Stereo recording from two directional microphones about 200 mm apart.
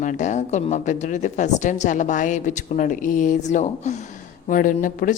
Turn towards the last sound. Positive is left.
turn(degrees=40)  # may be behind; listen again after turning